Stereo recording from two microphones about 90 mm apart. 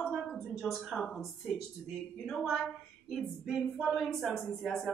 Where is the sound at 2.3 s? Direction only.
Centre (ahead or behind).